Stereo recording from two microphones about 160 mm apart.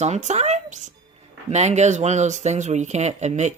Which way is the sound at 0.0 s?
45° right (ahead or behind).